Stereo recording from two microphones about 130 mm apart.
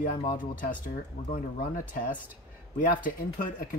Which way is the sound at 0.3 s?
90° left.